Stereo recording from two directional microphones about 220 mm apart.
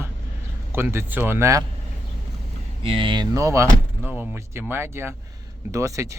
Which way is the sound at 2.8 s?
25° right (ahead or behind).